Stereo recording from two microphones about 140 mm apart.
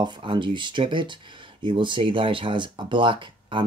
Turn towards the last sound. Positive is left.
turn(degrees=-35)  # may be behind; listen again after turning